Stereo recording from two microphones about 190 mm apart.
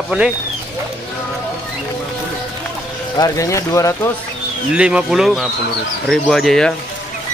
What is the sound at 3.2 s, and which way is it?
Speech, 15° left (ahead or behind).